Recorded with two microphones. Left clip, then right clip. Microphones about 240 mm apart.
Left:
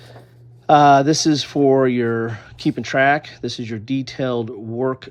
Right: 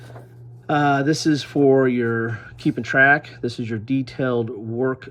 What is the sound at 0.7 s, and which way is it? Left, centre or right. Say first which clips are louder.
Speech: left 7 dB; centre.